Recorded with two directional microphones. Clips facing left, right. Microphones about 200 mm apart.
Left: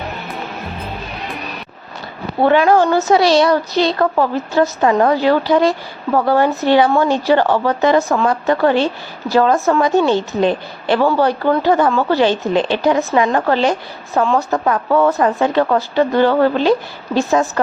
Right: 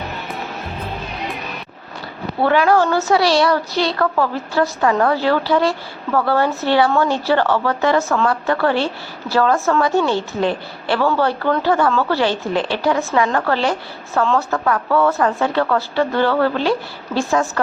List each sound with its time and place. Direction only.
2.4 s a woman's voice: 20° left (ahead or behind)